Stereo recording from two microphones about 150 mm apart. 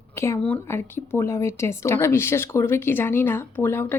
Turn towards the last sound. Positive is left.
turn(degrees=15)  # may be behind; listen again after turning